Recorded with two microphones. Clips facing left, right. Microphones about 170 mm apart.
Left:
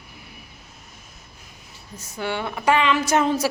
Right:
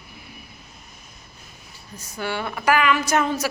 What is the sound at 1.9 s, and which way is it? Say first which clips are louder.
A woman's voice: left 1 dB; 20° left (ahead or behind).